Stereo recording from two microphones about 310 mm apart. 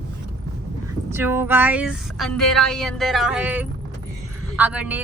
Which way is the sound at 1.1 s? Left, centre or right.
Centre.